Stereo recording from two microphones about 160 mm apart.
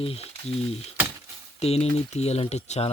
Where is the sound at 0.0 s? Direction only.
35° left (ahead or behind).